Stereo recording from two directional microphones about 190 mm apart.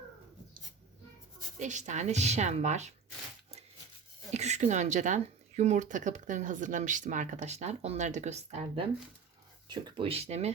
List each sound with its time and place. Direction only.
1.5 s speech: 40° right (ahead or behind)
4.3 s speech: 35° right (ahead or behind)
9.6 s speech: 25° right (ahead or behind)